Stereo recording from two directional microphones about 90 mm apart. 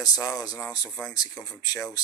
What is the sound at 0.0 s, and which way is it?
Speech, 40° left (ahead or behind).